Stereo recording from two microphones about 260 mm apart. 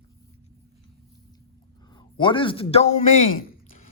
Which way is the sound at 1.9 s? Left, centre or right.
Centre.